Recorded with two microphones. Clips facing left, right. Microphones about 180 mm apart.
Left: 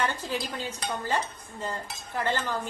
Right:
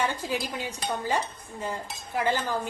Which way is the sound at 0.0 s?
10° right (ahead or behind).